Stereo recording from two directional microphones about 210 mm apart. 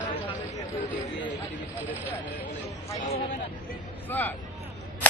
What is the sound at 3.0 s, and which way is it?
Speech, 35° left (ahead or behind).